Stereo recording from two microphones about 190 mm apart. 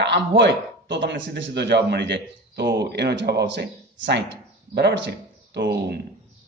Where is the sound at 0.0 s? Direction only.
65° right (ahead or behind).